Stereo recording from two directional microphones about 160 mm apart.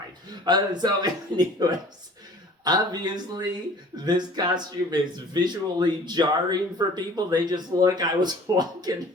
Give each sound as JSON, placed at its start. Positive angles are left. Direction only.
{"t": 0.4, "sound": "speech", "side_deg": -25}